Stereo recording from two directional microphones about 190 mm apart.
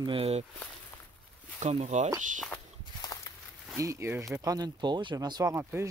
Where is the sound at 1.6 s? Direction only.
35° right (ahead or behind).